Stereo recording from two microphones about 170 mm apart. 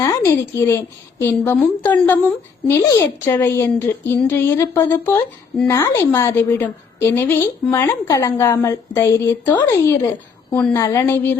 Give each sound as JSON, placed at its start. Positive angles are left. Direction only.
{"t": 0.0, "sound": "a woman's voice", "side_deg": 15}